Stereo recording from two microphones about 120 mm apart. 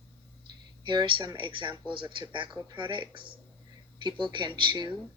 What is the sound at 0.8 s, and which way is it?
Speech, 40° right (ahead or behind).